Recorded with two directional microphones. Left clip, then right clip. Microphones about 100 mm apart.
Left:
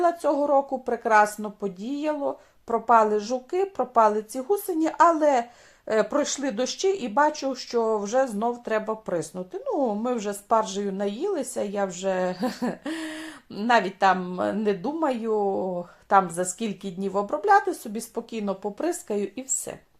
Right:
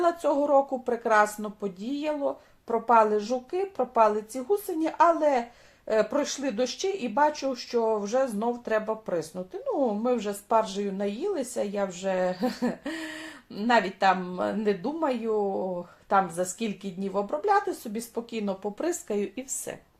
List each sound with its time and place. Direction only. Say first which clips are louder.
0.0 s speech: left 2 dB; 30° left (ahead or behind)